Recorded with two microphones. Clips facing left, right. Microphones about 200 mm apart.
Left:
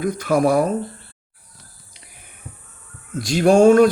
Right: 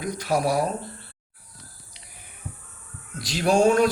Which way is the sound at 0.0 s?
50° left (ahead or behind).